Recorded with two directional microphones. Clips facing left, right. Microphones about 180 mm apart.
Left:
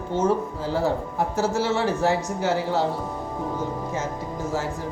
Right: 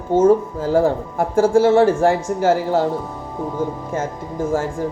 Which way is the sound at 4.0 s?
50° right (ahead or behind).